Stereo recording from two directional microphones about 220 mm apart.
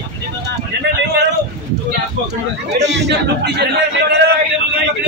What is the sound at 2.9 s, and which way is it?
Speech, 50° right (ahead or behind).